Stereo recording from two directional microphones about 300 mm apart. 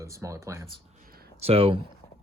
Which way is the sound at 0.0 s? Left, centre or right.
Centre.